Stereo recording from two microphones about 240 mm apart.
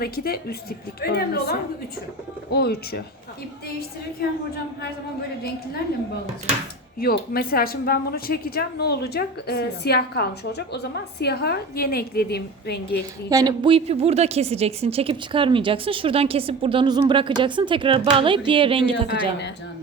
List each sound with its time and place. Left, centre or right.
1.0 s speech: left
4.2 s speech: left
7.0 s speech: left
13.3 s a woman's voice: centre